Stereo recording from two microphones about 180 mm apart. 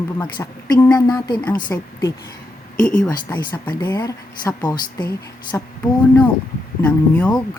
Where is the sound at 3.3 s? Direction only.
20° left (ahead or behind).